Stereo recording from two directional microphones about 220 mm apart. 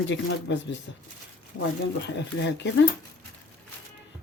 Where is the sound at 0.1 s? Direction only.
55° left (ahead or behind).